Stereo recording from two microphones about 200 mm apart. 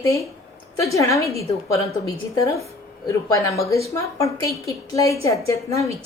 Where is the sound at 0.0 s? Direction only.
15° left (ahead or behind).